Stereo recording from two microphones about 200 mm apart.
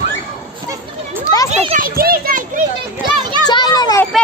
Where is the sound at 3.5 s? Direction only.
20° left (ahead or behind).